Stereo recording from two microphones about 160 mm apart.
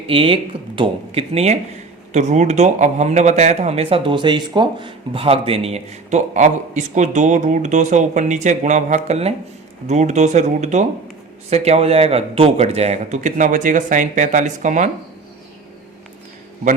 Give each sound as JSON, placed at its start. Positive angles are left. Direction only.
{"t": 0.1, "sound": "speech", "side_deg": -35}